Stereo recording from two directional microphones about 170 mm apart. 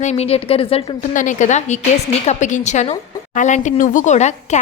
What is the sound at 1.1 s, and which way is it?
Speech, 50° left (ahead or behind).